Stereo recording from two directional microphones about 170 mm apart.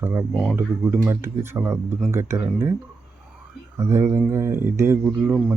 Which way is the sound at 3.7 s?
15° right (ahead or behind).